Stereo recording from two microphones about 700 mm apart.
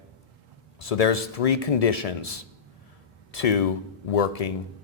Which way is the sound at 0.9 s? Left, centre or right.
Left.